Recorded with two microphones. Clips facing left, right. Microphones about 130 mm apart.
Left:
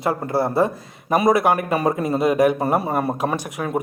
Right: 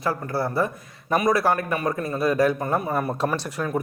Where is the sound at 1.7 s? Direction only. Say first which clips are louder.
Left 5 dB; 30° left (ahead or behind).